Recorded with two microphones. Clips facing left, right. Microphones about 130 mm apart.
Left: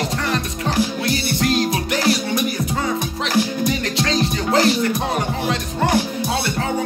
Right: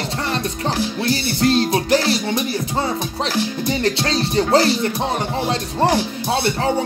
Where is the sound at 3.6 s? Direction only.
30° right (ahead or behind).